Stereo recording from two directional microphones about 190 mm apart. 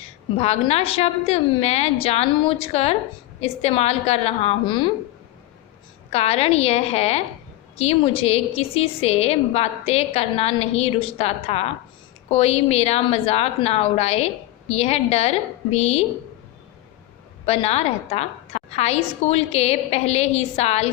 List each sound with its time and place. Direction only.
0.3 s a woman's voice: 30° left (ahead or behind)
6.1 s a woman's voice: 35° left (ahead or behind)
17.4 s a woman's voice: 35° left (ahead or behind)